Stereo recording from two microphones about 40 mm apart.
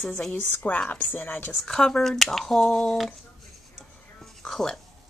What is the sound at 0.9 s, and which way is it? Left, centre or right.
Speech, left.